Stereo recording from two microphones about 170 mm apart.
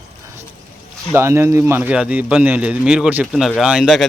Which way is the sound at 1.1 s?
15° right (ahead or behind).